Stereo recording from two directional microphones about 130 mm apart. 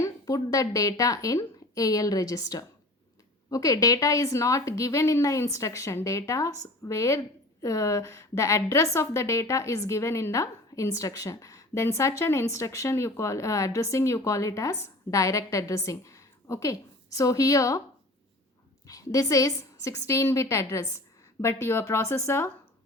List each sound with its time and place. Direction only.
0.0 s a woman's voice: 25° left (ahead or behind)
18.9 s a woman's voice: 25° left (ahead or behind)